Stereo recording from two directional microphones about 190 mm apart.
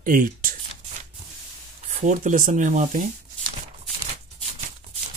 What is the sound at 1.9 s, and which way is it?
Speech, 40° right (ahead or behind).